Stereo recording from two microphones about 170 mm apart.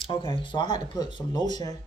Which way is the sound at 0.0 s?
30° left (ahead or behind).